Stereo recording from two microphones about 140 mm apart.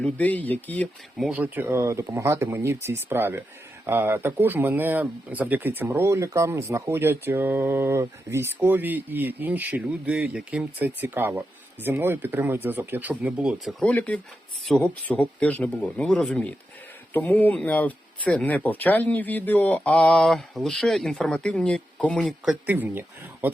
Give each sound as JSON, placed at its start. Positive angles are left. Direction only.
{"t": 0.0, "sound": "speech", "side_deg": 10}
{"t": 1.2, "sound": "speech", "side_deg": -10}
{"t": 13.8, "sound": "speech", "side_deg": 10}
{"t": 22.6, "sound": "speech", "side_deg": -10}